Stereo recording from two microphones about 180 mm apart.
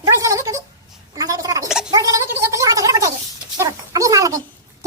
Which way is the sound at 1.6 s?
5° right (ahead or behind).